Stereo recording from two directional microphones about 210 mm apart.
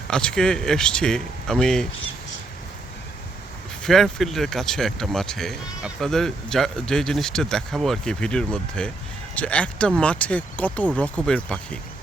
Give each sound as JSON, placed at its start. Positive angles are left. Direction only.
{"t": 0.1, "sound": "speech", "side_deg": 5}
{"t": 3.8, "sound": "speech", "side_deg": 0}